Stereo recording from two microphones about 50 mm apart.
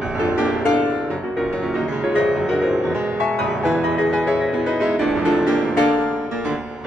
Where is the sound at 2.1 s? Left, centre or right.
Centre.